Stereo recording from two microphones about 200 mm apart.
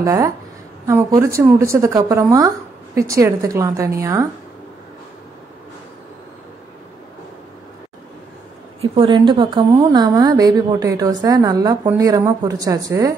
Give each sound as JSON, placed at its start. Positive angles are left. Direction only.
{"t": 0.0, "sound": "a woman's voice", "side_deg": -15}
{"t": 8.9, "sound": "a woman's voice", "side_deg": -25}